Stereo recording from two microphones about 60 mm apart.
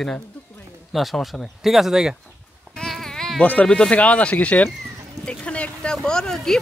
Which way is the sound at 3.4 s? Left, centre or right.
Left.